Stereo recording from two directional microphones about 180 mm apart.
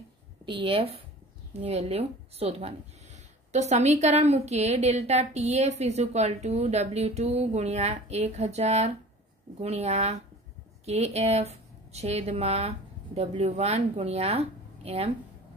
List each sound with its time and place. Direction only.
0.5 s speech: 30° right (ahead or behind)